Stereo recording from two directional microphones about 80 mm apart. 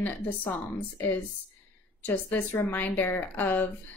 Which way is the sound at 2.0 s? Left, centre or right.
Left.